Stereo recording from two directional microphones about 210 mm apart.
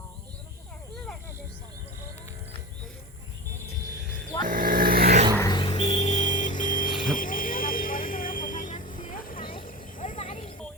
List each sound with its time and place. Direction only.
4.4 s vehicle: 40° right (ahead or behind)
5.4 s vehicle: 20° left (ahead or behind); by 10.2 s 40° left (ahead or behind)
10.2 s a sound: 30° left (ahead or behind)